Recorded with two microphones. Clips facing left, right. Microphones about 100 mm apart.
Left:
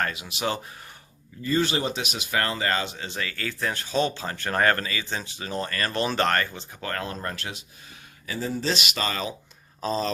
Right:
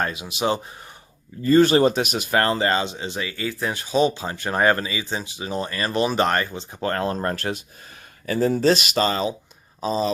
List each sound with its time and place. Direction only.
0.0 s speech: 20° right (ahead or behind)
1.4 s speech: 45° right (ahead or behind)
2.6 s speech: 25° right (ahead or behind)
6.7 s speech: 30° right (ahead or behind)
9.8 s speech: 15° right (ahead or behind)